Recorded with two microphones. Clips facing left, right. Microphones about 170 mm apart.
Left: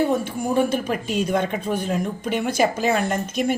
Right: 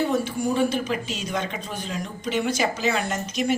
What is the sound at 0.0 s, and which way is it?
A woman's voice, 50° left (ahead or behind).